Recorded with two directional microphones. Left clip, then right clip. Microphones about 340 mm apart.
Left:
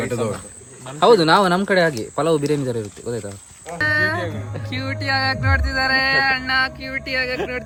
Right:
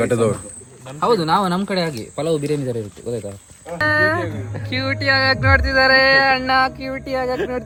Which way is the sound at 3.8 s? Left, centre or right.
Centre.